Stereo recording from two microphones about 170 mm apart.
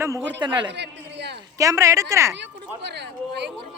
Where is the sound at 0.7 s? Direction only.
90° right.